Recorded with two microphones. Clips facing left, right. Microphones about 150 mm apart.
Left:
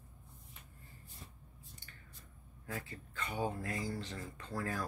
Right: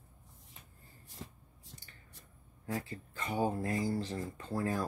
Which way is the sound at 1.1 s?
90° right.